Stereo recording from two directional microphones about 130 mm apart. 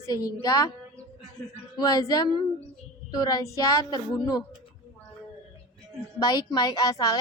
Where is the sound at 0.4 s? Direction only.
25° left (ahead or behind).